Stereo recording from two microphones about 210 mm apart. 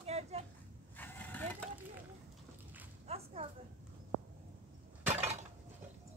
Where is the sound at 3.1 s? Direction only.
30° right (ahead or behind).